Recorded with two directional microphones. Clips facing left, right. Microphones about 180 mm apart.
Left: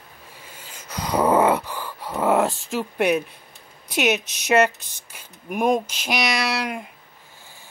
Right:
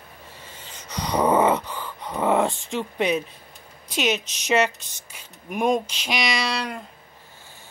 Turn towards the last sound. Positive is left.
turn(degrees=10)  # may be behind; listen again after turning